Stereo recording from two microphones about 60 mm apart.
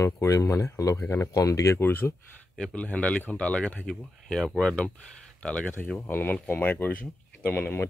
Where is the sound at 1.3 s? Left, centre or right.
Left.